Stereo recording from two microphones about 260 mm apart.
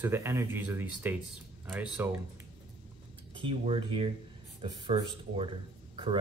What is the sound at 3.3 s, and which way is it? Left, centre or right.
Speech, centre.